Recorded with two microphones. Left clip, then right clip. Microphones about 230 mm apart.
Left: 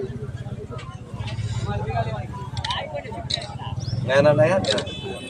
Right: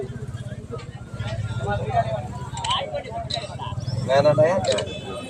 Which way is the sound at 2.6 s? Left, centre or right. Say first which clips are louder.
Right 3 dB; right.